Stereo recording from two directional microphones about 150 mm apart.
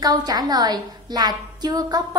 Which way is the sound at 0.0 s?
25° right (ahead or behind).